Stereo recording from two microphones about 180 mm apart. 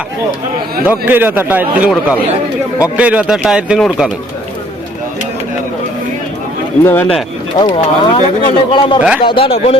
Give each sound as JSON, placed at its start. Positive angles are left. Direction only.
{"t": 0.9, "sound": "a man's voice", "side_deg": -10}
{"t": 6.8, "sound": "speech", "side_deg": 10}
{"t": 7.6, "sound": "speech", "side_deg": 25}
{"t": 9.0, "sound": "a man's voice", "side_deg": -5}
{"t": 9.2, "sound": "a man's voice", "side_deg": 30}